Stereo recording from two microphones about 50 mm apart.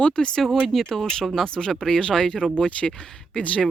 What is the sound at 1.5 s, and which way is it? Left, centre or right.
Speech, centre.